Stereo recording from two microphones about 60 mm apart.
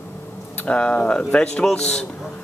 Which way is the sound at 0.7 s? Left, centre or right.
Left.